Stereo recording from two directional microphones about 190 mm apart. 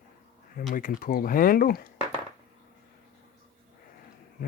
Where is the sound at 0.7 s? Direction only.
45° left (ahead or behind).